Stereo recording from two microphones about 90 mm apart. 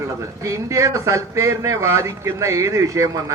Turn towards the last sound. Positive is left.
turn(degrees=-35)  # may be behind; listen again after turning